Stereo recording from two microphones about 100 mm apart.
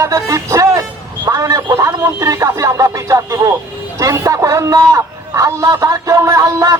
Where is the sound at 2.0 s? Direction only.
30° right (ahead or behind).